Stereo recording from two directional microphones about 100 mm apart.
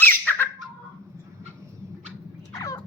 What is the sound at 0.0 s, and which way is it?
Squawk, 20° left (ahead or behind).